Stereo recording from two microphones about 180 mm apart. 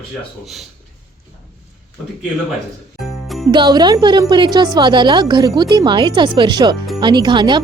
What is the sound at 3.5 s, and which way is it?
Speech, 25° right (ahead or behind).